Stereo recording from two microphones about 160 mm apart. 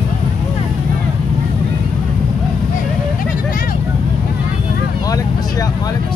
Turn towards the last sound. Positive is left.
turn(degrees=20)  # may be behind; listen again after turning